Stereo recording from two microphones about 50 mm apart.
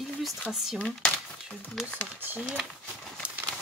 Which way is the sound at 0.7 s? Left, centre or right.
Left.